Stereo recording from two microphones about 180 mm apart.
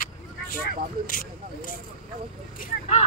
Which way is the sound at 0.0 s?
50° left (ahead or behind).